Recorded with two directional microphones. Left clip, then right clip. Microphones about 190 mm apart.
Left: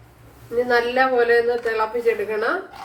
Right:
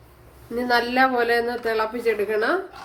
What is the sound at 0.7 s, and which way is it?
A woman's voice, 50° right (ahead or behind).